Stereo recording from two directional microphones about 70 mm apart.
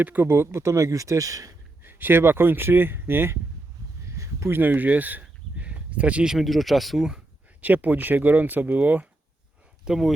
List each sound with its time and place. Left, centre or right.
0.0 s speech: right
1.8 s speech: right
4.2 s a sound: right
4.6 s a sound: right
6.3 s speech: centre
7.6 s speech: right
9.8 s speech: centre